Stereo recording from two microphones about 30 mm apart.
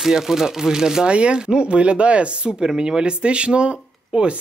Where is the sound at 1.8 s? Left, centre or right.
Right.